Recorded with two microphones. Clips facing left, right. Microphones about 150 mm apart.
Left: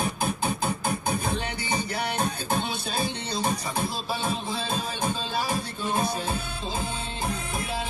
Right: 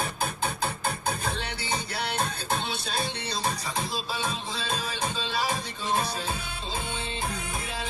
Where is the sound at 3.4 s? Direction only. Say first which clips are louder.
Left 4 dB; 55° left (ahead or behind).